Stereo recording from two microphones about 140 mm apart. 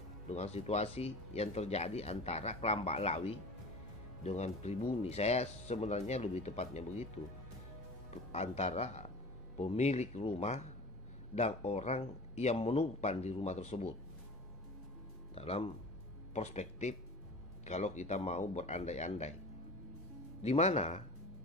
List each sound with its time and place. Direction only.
0.3 s speech: 50° left (ahead or behind)
8.3 s speech: 50° left (ahead or behind)
15.3 s speech: 45° left (ahead or behind)
20.4 s speech: 50° left (ahead or behind)